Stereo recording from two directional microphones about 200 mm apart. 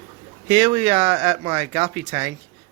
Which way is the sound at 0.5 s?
10° right (ahead or behind).